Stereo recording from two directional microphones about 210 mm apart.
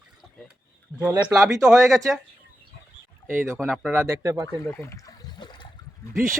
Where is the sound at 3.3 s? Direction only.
10° right (ahead or behind).